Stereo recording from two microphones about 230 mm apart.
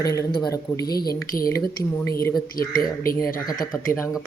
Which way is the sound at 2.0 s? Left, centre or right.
Centre.